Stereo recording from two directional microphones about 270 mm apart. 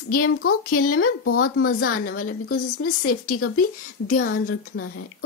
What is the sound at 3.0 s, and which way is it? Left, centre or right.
Speech, left.